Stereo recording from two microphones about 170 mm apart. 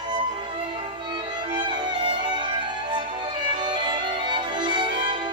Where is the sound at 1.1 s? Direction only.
25° right (ahead or behind).